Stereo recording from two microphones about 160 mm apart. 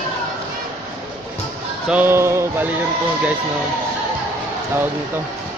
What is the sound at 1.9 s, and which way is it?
Speech, 10° right (ahead or behind).